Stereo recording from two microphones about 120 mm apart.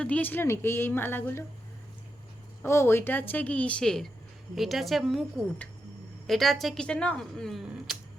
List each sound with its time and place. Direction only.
0.0 s a woman's voice: 15° left (ahead or behind)
2.6 s speech: 20° left (ahead or behind); by 5.2 s centre (ahead or behind)
6.2 s speech: centre (ahead or behind)